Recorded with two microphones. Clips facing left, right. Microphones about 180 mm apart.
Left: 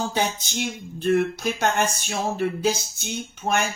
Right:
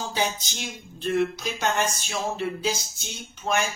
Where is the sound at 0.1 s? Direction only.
60° left (ahead or behind).